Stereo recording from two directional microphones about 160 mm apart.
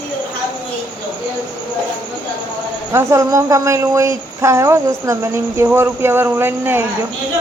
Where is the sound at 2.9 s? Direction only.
15° right (ahead or behind).